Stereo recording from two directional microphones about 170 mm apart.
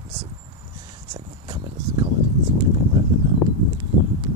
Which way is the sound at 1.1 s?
25° right (ahead or behind).